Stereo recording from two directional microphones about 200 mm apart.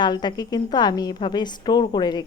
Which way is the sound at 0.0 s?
20° left (ahead or behind).